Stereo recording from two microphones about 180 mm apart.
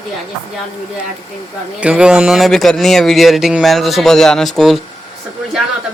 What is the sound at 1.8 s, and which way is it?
Speech, 5° right (ahead or behind).